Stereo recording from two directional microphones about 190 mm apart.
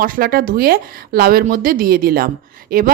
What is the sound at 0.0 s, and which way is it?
A woman's voice, 50° right (ahead or behind).